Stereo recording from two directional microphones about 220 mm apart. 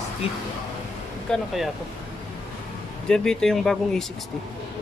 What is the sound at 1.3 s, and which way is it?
Speech, 5° left (ahead or behind).